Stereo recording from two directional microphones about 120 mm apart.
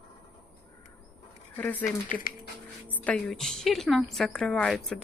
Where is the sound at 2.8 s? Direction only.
15° left (ahead or behind).